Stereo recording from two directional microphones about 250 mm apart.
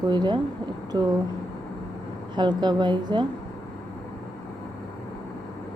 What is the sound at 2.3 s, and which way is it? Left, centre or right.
Speech, centre.